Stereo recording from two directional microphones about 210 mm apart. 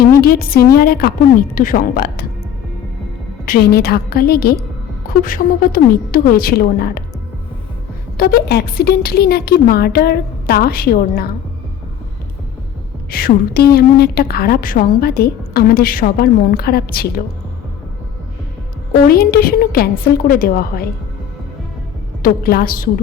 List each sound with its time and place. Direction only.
0.2 s a woman's voice: 45° left (ahead or behind)
3.4 s a woman's voice: 45° left (ahead or behind)
8.2 s a woman's voice: 45° left (ahead or behind)
13.1 s a woman's voice: 45° left (ahead or behind)
18.9 s a woman's voice: 45° left (ahead or behind)
22.2 s a woman's voice: 45° left (ahead or behind)